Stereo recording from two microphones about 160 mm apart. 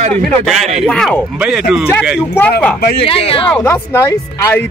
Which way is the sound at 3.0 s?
35° left (ahead or behind).